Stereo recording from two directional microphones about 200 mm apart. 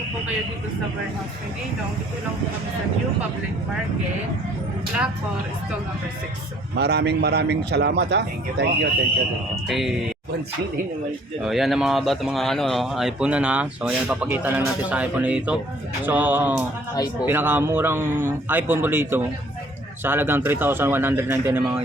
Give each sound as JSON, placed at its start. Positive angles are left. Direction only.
{"t": 6.7, "sound": "a man's voice", "side_deg": -55}
{"t": 9.6, "sound": "speech", "side_deg": 0}
{"t": 11.4, "sound": "speech", "side_deg": 0}
{"t": 16.9, "sound": "speech", "side_deg": 20}
{"t": 17.2, "sound": "speech", "side_deg": -10}